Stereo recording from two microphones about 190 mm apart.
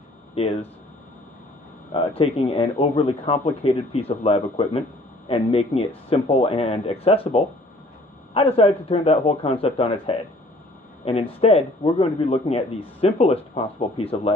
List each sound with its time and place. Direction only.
0.3 s speech: 30° left (ahead or behind)
2.0 s a man's voice: 30° left (ahead or behind)